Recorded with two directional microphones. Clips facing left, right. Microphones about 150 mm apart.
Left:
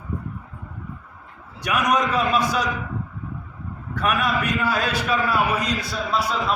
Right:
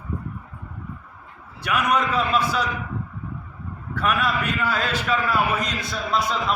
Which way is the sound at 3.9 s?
15° left (ahead or behind).